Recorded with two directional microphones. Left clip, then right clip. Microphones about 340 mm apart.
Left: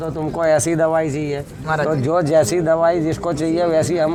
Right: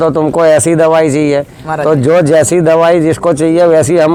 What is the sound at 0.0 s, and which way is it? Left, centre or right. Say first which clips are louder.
Speech: right 12 dB; right.